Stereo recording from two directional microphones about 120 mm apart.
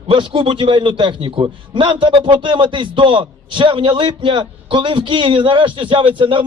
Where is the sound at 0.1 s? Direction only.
45° right (ahead or behind).